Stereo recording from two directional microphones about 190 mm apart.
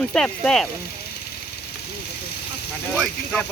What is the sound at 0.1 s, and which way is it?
Speech, 5° left (ahead or behind).